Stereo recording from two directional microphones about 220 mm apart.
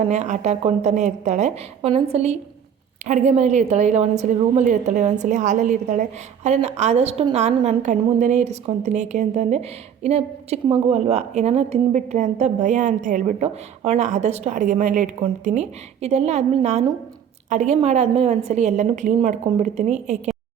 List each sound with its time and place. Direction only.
0.0 s a woman's voice: 30° right (ahead or behind)